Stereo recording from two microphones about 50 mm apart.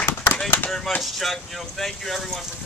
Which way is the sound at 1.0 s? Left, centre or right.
Centre.